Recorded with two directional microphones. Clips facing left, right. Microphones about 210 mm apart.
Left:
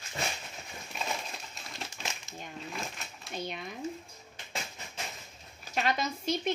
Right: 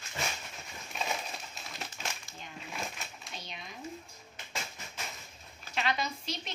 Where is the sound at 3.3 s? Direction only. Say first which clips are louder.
Left 10 dB; 55° left (ahead or behind).